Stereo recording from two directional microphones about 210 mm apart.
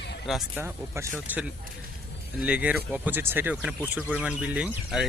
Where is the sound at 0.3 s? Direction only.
5° right (ahead or behind).